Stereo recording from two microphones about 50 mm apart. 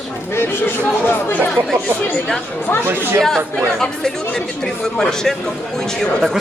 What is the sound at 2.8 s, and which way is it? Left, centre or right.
Speech, right.